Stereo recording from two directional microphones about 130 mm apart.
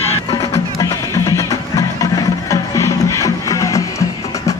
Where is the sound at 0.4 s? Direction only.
25° left (ahead or behind).